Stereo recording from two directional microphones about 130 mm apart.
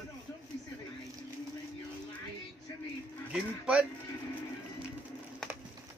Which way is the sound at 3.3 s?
5° right (ahead or behind).